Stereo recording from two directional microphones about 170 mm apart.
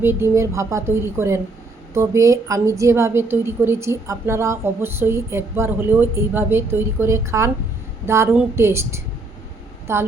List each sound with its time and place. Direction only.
0.0 s a woman's voice: 15° right (ahead or behind)